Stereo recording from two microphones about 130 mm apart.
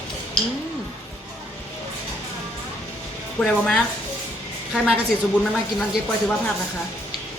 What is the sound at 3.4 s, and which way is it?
Speech, 10° left (ahead or behind).